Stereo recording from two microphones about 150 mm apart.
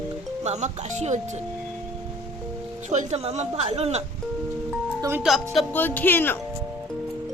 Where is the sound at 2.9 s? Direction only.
50° right (ahead or behind).